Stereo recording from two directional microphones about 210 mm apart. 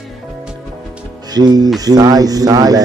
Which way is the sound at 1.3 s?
20° right (ahead or behind).